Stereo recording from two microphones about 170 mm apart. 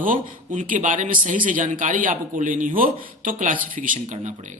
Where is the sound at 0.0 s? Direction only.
50° right (ahead or behind).